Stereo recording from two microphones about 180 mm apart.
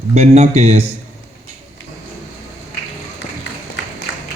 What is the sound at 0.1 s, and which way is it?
Speech, 35° right (ahead or behind).